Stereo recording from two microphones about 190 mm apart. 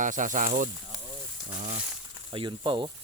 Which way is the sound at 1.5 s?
40° right (ahead or behind).